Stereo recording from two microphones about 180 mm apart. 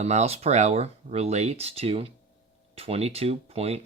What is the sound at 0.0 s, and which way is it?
Speech, 40° right (ahead or behind).